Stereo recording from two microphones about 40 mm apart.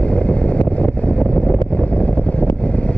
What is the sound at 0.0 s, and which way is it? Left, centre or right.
Vehicle, left.